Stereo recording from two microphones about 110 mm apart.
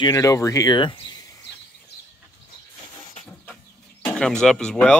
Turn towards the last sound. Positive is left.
turn(degrees=5)  # may be behind; listen again after turning